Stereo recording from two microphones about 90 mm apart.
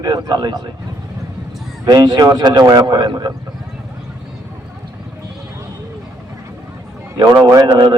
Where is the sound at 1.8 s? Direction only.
50° right (ahead or behind).